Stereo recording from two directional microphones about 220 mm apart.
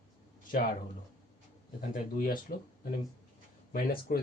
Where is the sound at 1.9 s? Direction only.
40° left (ahead or behind).